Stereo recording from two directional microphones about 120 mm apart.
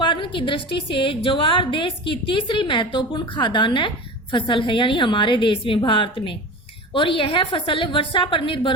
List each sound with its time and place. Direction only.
0.0 s a woman's voice: 45° left (ahead or behind)